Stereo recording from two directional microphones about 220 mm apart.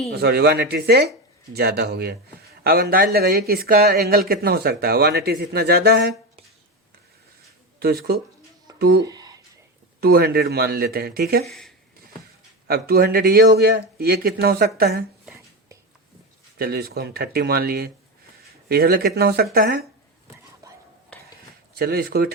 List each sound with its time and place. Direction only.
0.1 s speech: 45° right (ahead or behind)
8.8 s speech: 45° right (ahead or behind)
9.0 s a sound: 15° right (ahead or behind)
10.0 s speech: 45° right (ahead or behind)
11.4 s speech: centre (ahead or behind)
12.6 s speech: 45° right (ahead or behind)
16.6 s speech: 45° right (ahead or behind)
21.1 s a sound: 5° left (ahead or behind)
21.8 s speech: 45° right (ahead or behind)